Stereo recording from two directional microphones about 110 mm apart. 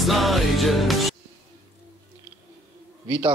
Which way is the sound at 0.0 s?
Centre (ahead or behind).